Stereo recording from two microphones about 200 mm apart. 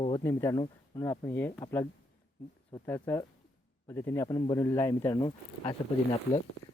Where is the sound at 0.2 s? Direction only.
15° left (ahead or behind).